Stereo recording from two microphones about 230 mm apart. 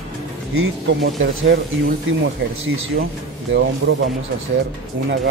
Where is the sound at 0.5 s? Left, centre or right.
Right.